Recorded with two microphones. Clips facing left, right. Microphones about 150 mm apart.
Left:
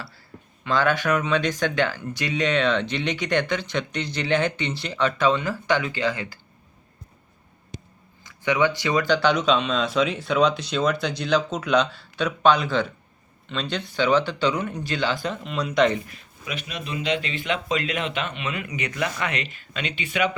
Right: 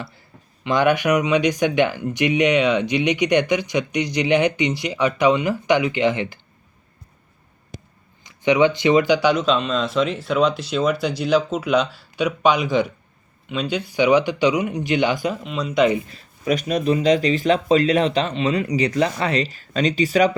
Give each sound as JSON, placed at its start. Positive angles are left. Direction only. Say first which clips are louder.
{"t": 0.6, "sound": "speech", "louder": "right 4 dB", "side_deg": -15}
{"t": 8.2, "sound": "speech", "louder": "right 5 dB", "side_deg": -20}
{"t": 15.4, "sound": "speech", "louder": "right 2 dB", "side_deg": 0}
{"t": 16.0, "sound": "speech", "louder": "right 13 dB", "side_deg": -35}